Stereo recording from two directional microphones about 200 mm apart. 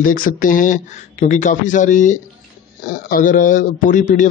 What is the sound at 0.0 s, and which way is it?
A man's voice, 45° left (ahead or behind).